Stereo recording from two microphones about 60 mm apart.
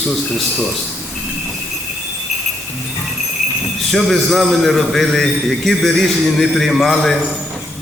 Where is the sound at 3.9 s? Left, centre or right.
Centre.